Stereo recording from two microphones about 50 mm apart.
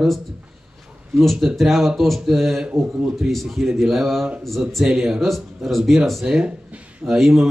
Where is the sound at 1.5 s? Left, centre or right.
Centre.